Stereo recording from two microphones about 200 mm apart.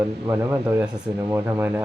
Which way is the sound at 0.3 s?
10° right (ahead or behind).